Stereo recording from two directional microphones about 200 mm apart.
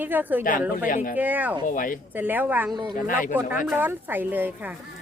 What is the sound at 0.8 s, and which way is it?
Speech, 40° left (ahead or behind).